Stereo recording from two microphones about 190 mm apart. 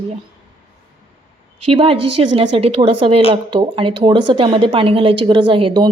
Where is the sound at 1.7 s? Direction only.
30° right (ahead or behind).